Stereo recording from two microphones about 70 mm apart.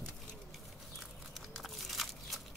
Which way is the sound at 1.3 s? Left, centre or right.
Centre.